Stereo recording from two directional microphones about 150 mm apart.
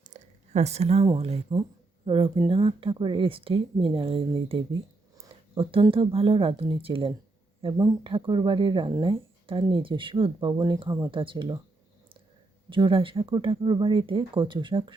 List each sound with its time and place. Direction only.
0.0 s a sound: 50° right (ahead or behind)
1.0 s speech: 30° right (ahead or behind)
12.7 s speech: 35° right (ahead or behind)